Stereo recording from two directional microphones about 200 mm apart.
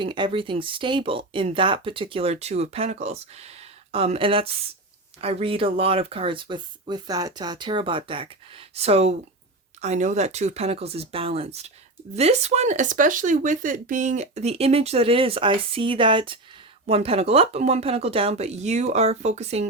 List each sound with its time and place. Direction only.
0.0 s speech: 25° right (ahead or behind)